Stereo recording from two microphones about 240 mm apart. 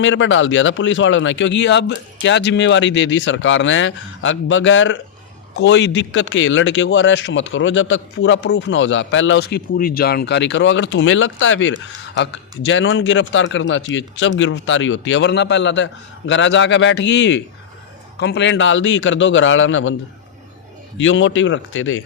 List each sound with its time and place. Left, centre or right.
0.0 s speech: left
21.0 s speech: left